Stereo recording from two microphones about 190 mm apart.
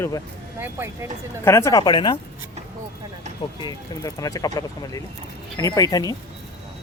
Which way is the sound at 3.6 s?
20° left (ahead or behind).